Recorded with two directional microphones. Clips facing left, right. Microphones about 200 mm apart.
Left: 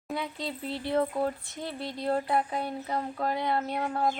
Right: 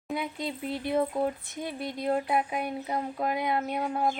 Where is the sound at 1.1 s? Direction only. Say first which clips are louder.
Right 1 dB; centre (ahead or behind).